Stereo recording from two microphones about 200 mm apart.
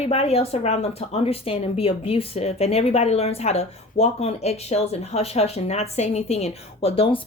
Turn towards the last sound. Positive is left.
turn(degrees=30)  # may be behind; listen again after turning